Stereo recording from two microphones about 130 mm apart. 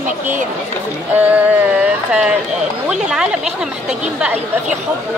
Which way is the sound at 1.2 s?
10° right (ahead or behind).